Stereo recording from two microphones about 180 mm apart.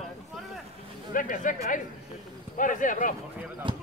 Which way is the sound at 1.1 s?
50° left (ahead or behind).